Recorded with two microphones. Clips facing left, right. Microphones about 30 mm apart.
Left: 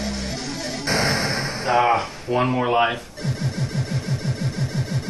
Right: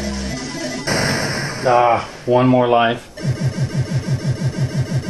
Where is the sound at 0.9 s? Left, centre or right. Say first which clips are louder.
Right 2 dB; right.